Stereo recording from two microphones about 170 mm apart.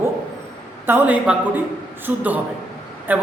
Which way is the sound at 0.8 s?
10° right (ahead or behind).